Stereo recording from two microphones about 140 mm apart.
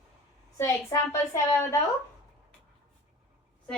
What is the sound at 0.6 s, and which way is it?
A woman's voice, 20° left (ahead or behind).